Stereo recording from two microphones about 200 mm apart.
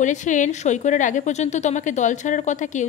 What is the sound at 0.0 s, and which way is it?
A woman's voice, 40° left (ahead or behind).